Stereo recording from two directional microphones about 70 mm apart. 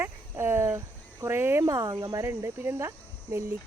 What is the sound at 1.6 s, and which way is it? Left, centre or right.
Speech, right.